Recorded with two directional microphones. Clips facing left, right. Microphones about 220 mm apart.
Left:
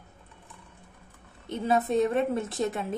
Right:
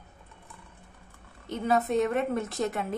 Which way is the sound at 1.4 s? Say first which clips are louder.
Even; 25° left (ahead or behind).